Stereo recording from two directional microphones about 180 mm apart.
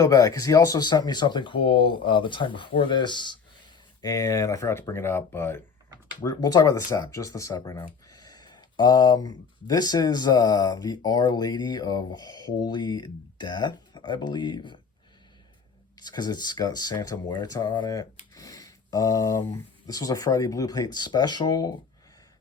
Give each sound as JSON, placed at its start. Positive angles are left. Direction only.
{"t": 0.0, "sound": "speech", "side_deg": 20}
{"t": 6.1, "sound": "speech", "side_deg": 25}
{"t": 16.0, "sound": "speech", "side_deg": 25}